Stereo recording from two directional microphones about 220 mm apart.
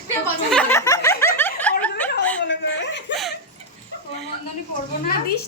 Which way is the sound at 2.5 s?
55° left (ahead or behind).